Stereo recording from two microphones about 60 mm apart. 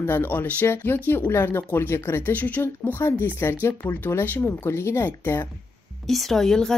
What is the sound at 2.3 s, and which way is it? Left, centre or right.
Speech, left.